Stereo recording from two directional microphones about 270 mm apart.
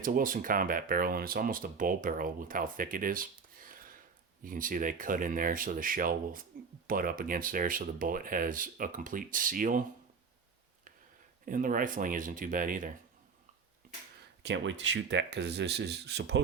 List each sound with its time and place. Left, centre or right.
0.0 s speech: right
11.4 s speech: right
14.4 s speech: right